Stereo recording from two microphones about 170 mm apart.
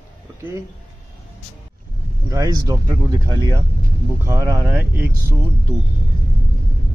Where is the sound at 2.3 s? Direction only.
20° right (ahead or behind).